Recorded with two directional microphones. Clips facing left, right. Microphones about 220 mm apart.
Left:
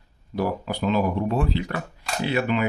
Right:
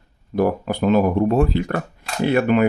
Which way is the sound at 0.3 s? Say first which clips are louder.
Right 6 dB; 50° right (ahead or behind).